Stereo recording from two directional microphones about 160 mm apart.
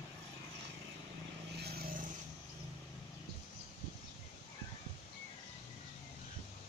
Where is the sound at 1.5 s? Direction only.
85° right.